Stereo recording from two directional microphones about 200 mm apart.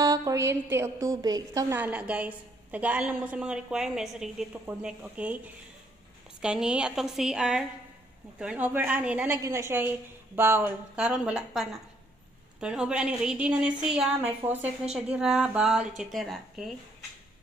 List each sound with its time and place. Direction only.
0.0 s a woman's voice: 15° right (ahead or behind)
6.4 s a woman's voice: 5° right (ahead or behind)